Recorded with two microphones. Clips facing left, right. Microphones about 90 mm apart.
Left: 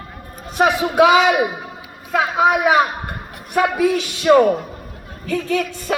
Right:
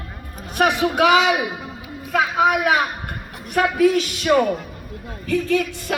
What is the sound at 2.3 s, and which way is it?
A man's voice, 25° left (ahead or behind).